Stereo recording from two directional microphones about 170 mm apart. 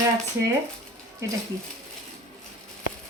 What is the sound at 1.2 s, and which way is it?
Speech, 15° right (ahead or behind).